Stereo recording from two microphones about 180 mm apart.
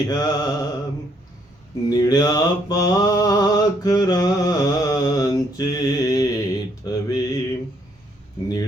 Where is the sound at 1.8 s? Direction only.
20° left (ahead or behind).